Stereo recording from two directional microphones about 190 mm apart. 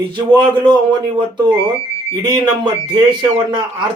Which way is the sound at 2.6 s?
25° right (ahead or behind).